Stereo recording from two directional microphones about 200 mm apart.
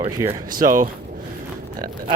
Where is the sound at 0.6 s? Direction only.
45° right (ahead or behind).